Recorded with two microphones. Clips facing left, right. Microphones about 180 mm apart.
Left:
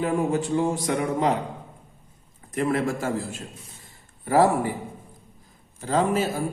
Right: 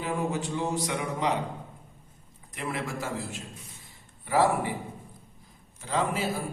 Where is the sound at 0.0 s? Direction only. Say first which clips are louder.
Left 6 dB; 50° left (ahead or behind).